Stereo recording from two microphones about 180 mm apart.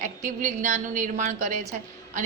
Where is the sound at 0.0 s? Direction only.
45° right (ahead or behind).